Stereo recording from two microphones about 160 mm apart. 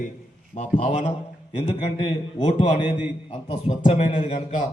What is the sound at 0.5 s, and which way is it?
A man's voice, 40° left (ahead or behind).